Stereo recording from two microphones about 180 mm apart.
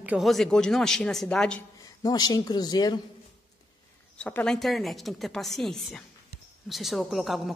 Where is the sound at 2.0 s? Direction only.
20° left (ahead or behind).